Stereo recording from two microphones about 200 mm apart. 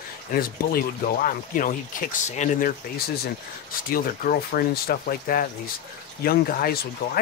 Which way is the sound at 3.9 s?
45° left (ahead or behind).